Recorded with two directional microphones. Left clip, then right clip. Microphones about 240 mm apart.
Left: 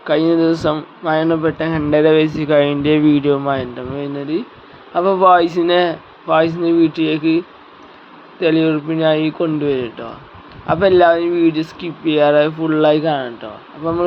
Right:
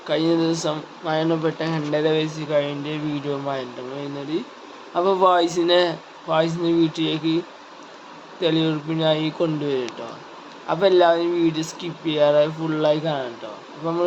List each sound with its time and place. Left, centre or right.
0.1 s speech: left
4.9 s speech: centre